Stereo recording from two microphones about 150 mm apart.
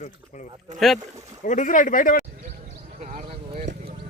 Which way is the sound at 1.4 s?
60° left (ahead or behind).